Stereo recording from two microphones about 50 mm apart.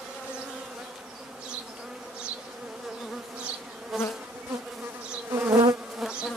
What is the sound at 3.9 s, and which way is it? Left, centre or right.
Bee, centre.